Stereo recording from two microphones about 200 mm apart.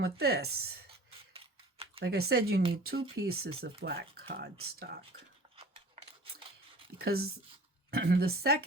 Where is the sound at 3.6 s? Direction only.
50° right (ahead or behind).